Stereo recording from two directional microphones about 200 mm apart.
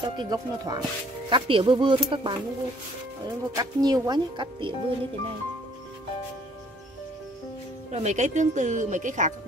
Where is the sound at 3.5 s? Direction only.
20° right (ahead or behind).